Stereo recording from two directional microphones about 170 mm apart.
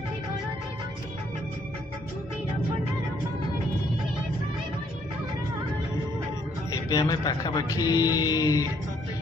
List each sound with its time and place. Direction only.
6.7 s speech: 20° left (ahead or behind)